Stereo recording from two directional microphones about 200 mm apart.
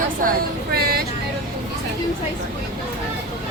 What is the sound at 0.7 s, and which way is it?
Vehicle, 50° right (ahead or behind).